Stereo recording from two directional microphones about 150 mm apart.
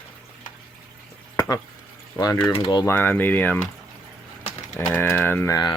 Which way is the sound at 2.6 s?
30° left (ahead or behind).